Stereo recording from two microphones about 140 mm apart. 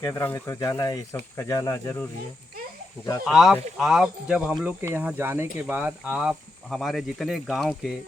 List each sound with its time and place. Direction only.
0.0 s speech: 20° left (ahead or behind)
3.2 s speech: centre (ahead or behind)